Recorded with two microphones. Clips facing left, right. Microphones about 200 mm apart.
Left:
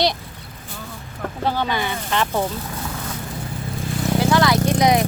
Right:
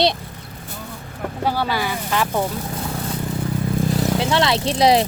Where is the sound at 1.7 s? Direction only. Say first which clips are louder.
Right 1 dB; 5° right (ahead or behind).